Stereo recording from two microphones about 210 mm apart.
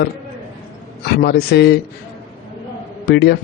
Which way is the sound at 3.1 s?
50° left (ahead or behind).